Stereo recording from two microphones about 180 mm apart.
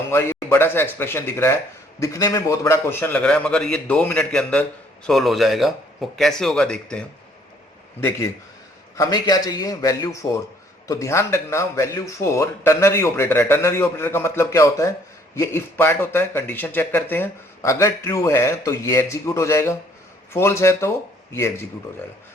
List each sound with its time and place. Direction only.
0.1 s speech: 15° left (ahead or behind)
9.0 s a man's voice: 20° left (ahead or behind)